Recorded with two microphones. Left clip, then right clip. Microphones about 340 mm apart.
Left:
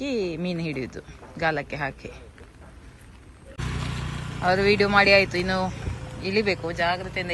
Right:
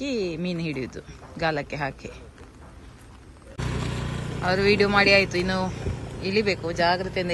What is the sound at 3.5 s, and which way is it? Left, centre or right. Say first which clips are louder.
Vehicle: right 2 dB; right.